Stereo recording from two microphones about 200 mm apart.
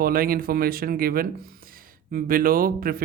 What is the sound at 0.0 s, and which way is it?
Speech, 45° right (ahead or behind).